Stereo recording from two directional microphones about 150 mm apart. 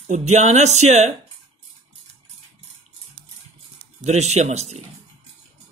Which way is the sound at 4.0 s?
50° right (ahead or behind).